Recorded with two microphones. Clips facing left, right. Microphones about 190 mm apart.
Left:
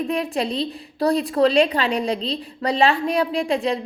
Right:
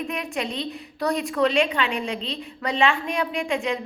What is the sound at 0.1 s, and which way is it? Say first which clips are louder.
A woman's voice: left 6 dB; 35° left (ahead or behind).